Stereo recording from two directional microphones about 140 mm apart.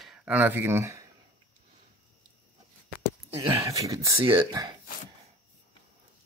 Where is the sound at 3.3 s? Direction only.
20° right (ahead or behind).